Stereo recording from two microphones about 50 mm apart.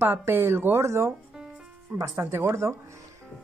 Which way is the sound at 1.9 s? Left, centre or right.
Right.